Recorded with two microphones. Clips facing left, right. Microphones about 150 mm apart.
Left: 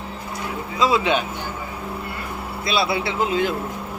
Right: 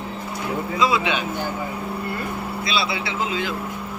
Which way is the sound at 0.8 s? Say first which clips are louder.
Left 3 dB; 40° left (ahead or behind).